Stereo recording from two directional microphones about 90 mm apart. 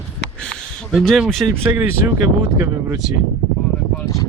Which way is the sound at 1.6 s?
25° right (ahead or behind).